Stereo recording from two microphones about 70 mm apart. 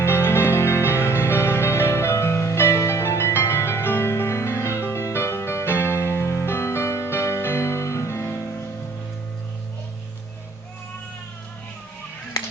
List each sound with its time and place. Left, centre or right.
0.0 s music: left